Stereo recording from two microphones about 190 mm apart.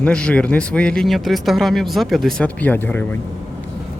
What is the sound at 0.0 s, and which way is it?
Speech, 5° left (ahead or behind).